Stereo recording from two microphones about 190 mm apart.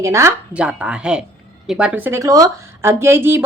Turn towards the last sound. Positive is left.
turn(degrees=-10)  # may be behind; listen again after turning